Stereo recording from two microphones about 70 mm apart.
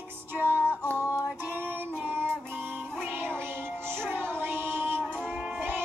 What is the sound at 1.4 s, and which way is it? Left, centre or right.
Female singing, right.